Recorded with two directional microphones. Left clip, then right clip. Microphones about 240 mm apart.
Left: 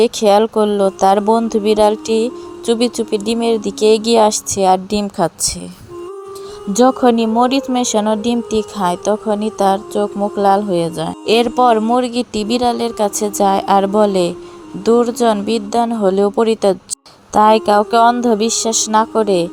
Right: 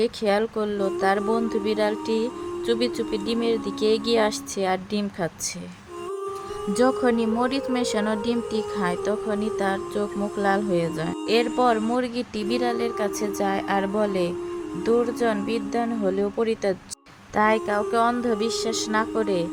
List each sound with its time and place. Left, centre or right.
0.0 s speech: left
6.7 s a woman's voice: centre